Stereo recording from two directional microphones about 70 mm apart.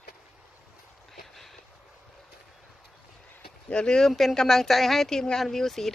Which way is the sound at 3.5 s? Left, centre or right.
Centre.